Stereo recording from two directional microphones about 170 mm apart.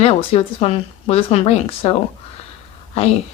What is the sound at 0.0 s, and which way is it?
Speech, 35° left (ahead or behind).